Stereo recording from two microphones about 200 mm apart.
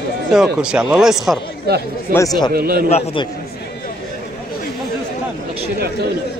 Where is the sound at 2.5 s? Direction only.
50° right (ahead or behind).